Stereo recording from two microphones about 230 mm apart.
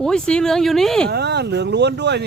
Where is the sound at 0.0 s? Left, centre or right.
Centre.